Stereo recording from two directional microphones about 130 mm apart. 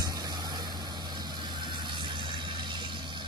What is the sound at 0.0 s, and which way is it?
Vehicle, 30° right (ahead or behind).